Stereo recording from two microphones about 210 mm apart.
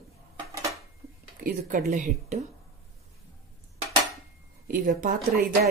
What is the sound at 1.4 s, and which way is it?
Speech, 45° right (ahead or behind).